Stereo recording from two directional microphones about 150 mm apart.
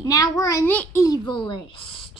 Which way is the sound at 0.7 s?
10° left (ahead or behind).